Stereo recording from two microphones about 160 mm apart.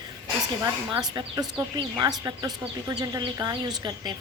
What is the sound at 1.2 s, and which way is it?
A woman's voice, 25° right (ahead or behind).